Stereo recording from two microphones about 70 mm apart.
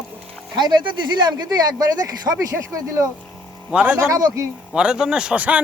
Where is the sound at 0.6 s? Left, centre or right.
Right.